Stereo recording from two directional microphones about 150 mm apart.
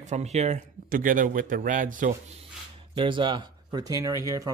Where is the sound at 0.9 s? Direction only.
65° right (ahead or behind).